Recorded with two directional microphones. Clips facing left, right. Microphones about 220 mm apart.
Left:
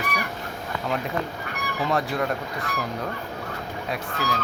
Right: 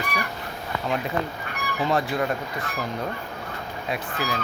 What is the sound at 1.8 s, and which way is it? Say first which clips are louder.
Speech: right 1 dB; centre (ahead or behind).